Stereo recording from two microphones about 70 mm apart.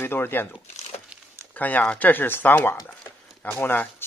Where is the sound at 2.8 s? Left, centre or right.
Left.